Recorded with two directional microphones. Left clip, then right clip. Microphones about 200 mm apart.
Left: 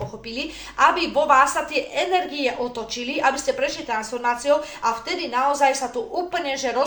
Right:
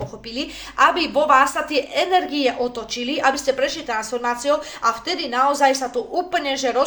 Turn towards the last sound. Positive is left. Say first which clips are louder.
# right 3 dB
turn(degrees=-45)  # may be behind; listen again after turning